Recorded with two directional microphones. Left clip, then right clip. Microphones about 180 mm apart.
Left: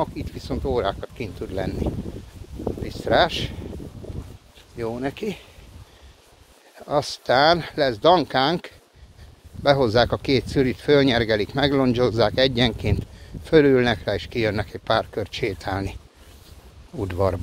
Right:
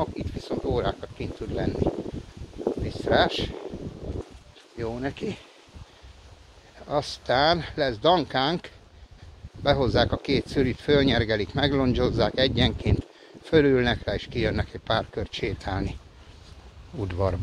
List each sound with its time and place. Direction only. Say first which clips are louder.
0.2 s speech: left 1 dB; 40° left (ahead or behind)
2.9 s speech: left 4 dB; 45° left (ahead or behind)
4.7 s speech: left 4 dB; 35° left (ahead or behind)
6.9 s speech: left 4 dB; 45° left (ahead or behind)
17.0 s speech: left 5 dB; 45° left (ahead or behind)